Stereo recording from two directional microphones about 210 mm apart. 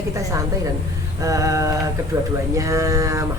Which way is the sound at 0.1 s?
15° right (ahead or behind).